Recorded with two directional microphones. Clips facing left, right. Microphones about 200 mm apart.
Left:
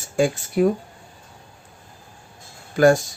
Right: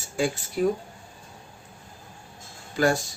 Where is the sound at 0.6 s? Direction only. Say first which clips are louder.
Left 5 dB; 60° left (ahead or behind).